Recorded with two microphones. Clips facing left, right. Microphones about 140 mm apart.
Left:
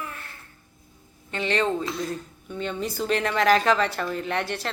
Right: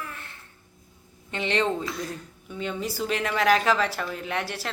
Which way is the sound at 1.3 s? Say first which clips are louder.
Left 1 dB; 20° right (ahead or behind).